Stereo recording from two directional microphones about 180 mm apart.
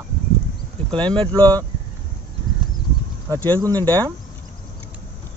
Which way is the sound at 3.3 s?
20° right (ahead or behind).